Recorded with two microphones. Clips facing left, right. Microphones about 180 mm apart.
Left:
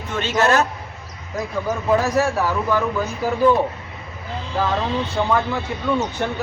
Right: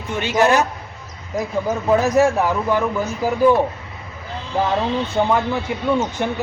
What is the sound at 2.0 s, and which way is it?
Speech, 20° right (ahead or behind).